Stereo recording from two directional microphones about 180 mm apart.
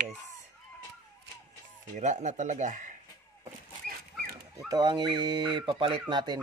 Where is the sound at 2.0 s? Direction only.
40° right (ahead or behind).